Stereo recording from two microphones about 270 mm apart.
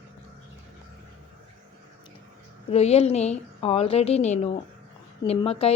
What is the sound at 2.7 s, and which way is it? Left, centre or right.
A woman's voice, left.